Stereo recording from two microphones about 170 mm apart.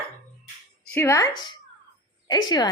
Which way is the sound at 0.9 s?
15° left (ahead or behind).